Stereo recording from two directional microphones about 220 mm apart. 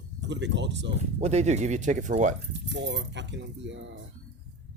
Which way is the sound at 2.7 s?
55° right (ahead or behind).